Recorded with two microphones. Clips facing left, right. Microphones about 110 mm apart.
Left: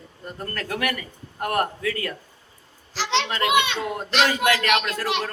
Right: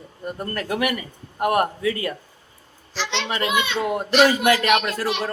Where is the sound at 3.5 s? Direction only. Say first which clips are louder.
Left 4 dB; 90° left.